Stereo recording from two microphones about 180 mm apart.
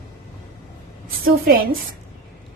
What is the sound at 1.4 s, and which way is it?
Speech, 60° right (ahead or behind).